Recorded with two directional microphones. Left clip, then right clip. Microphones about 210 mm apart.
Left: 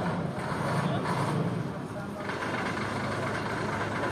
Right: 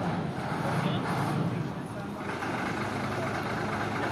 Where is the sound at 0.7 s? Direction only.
20° left (ahead or behind).